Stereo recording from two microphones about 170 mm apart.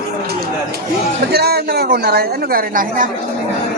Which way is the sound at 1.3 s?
70° right (ahead or behind).